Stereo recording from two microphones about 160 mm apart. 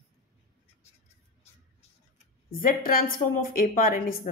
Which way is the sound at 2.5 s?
65° left (ahead or behind).